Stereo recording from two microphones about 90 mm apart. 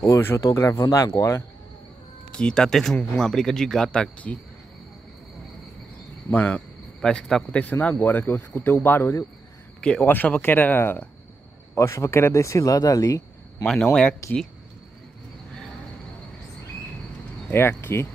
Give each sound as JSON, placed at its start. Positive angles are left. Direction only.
{"t": 0.0, "sound": "speech", "side_deg": 25}
{"t": 2.3, "sound": "speech", "side_deg": 10}
{"t": 6.3, "sound": "a man's voice", "side_deg": 15}
{"t": 9.8, "sound": "speech", "side_deg": 10}
{"t": 17.5, "sound": "speech", "side_deg": 25}